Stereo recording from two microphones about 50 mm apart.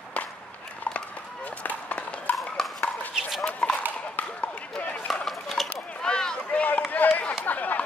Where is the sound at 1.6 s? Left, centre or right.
Left.